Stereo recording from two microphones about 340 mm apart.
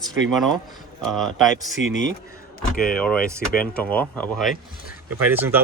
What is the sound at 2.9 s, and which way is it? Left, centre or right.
Speech, centre.